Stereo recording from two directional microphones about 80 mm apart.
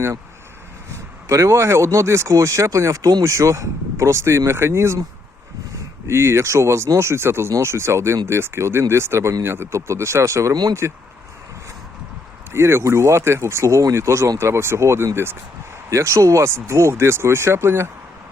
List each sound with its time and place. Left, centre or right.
1.3 s speech: right
3.2 s speech: right
6.1 s speech: right
12.5 s speech: right